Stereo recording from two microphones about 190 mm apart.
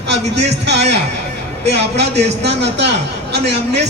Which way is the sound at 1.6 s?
60° right (ahead or behind).